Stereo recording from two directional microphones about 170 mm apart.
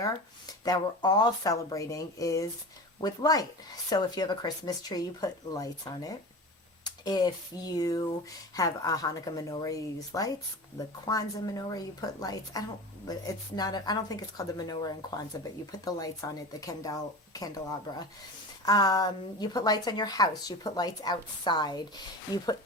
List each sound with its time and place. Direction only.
0.0 s a woman's voice: 20° left (ahead or behind)
6.8 s a sound: 25° left (ahead or behind)
7.8 s a woman's voice: 20° left (ahead or behind)
18.6 s a woman's voice: 20° left (ahead or behind)